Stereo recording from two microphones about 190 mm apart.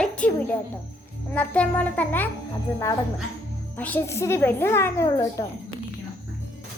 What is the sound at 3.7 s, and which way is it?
A woman's voice, 10° left (ahead or behind).